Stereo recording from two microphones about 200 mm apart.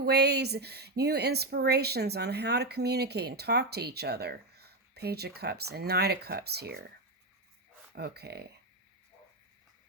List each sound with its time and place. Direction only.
0.0 s speech: 55° right (ahead or behind)
7.9 s speech: 55° right (ahead or behind)